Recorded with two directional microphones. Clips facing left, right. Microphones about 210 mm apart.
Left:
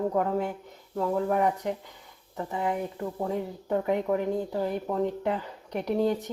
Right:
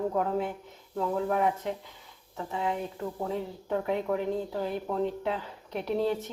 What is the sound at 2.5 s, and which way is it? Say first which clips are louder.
Speech: left 2 dB; 5° left (ahead or behind).